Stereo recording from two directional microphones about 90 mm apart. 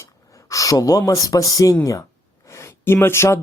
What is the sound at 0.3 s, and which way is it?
Speech, 35° left (ahead or behind).